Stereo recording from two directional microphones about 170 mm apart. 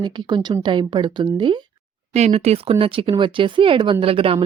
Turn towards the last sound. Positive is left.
turn(degrees=-35)  # may be behind; listen again after turning